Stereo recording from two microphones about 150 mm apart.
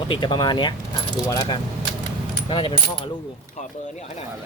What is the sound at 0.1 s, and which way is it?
Speech, 30° left (ahead or behind).